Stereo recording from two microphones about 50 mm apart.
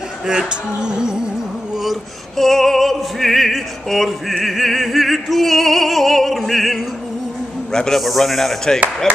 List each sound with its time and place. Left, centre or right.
0.3 s a sound: centre
2.3 s opera: centre
7.9 s opera: centre
9.1 s speech: centre